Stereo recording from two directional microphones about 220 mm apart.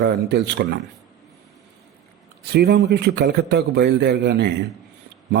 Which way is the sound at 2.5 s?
50° right (ahead or behind).